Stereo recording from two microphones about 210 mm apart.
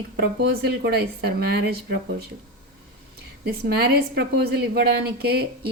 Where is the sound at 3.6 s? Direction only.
50° right (ahead or behind).